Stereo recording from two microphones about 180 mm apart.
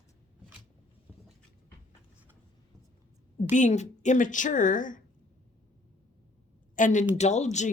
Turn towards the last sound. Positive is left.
turn(degrees=40)  # may be behind; listen again after turning